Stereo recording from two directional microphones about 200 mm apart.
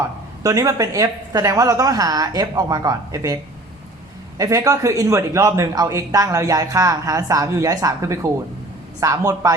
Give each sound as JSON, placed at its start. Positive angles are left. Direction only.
{"t": 0.4, "sound": "a man's voice", "side_deg": -15}
{"t": 4.4, "sound": "a man's voice", "side_deg": -15}